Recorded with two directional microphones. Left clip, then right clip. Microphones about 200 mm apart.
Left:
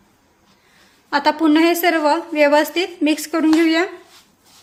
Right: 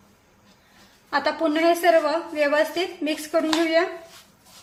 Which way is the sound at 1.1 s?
55° left (ahead or behind).